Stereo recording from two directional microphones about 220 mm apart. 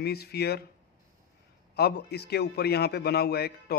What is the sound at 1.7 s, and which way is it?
A man's voice, 45° left (ahead or behind).